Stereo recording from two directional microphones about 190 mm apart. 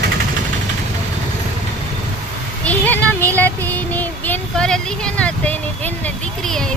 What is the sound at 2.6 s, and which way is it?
Child singing, 10° left (ahead or behind).